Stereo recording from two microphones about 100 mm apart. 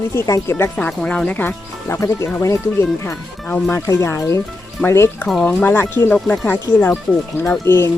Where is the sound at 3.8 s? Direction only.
30° left (ahead or behind).